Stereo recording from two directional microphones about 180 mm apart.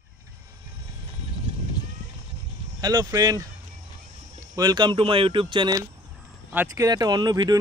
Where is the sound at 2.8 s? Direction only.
20° right (ahead or behind).